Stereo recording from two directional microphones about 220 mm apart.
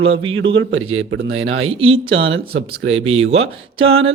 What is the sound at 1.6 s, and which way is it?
Speech, 25° right (ahead or behind).